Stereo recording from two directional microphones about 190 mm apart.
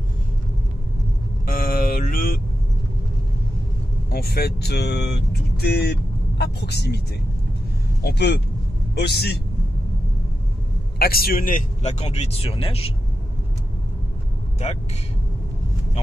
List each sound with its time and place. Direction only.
1.4 s vehicle: 50° left (ahead or behind)
4.1 s speech: 55° left (ahead or behind)
8.0 s speech: 60° left (ahead or behind)
11.0 s speech: 55° left (ahead or behind); by 12.9 s 30° left (ahead or behind)